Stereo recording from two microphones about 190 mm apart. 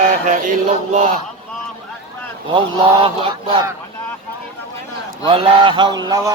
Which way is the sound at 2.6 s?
25° right (ahead or behind).